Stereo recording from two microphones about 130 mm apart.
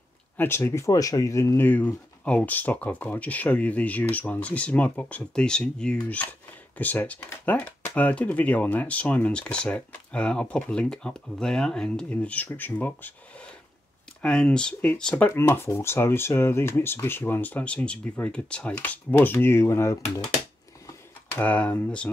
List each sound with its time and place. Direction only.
0.4 s speech: 20° left (ahead or behind)
21.4 s speech: 10° left (ahead or behind)